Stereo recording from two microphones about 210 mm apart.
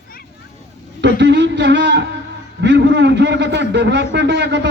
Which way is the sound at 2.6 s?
55° right (ahead or behind).